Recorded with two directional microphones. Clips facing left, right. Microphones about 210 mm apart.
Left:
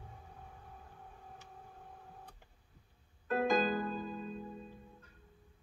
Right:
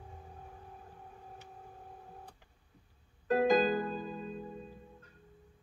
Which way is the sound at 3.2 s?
35° right (ahead or behind).